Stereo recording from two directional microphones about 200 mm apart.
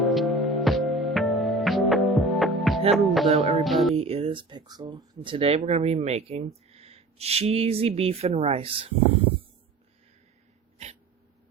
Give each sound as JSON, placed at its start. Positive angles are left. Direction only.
{"t": 0.0, "sound": "music", "side_deg": 0}
{"t": 3.9, "sound": "speech", "side_deg": -30}